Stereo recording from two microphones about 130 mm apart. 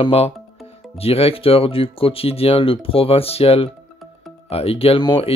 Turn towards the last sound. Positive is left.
turn(degrees=40)  # may be behind; listen again after turning